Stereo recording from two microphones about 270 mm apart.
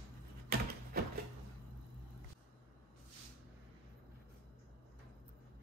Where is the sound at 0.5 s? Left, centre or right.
Right.